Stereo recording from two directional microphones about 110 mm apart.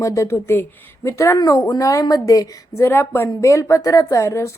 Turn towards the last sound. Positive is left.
turn(degrees=25)  # may be behind; listen again after turning